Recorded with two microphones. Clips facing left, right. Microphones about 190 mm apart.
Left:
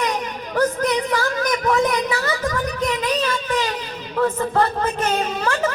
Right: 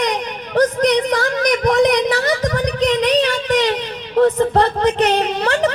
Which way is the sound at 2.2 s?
35° right (ahead or behind).